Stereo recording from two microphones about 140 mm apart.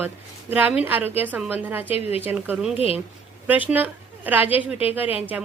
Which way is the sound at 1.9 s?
45° left (ahead or behind).